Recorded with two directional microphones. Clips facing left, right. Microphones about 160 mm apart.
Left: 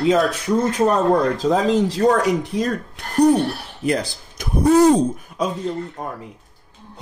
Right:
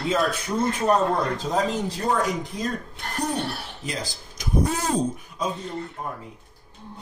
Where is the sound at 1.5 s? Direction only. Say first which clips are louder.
Left 7 dB; 90° left.